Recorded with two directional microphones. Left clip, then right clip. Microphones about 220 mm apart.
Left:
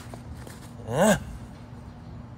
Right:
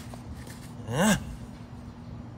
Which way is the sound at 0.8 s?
Centre (ahead or behind).